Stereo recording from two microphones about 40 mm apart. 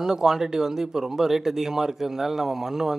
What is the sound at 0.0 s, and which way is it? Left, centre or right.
Speech, centre.